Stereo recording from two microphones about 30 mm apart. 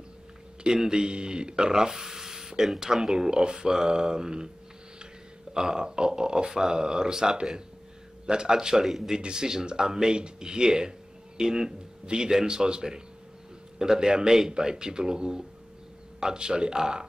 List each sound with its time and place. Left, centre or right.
0.7 s speech: right
5.5 s speech: right
8.8 s speech: centre
9.2 s speech: right